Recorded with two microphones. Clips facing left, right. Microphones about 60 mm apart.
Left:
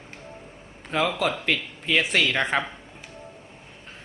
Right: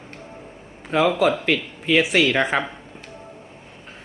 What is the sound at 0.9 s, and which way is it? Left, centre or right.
Speech, centre.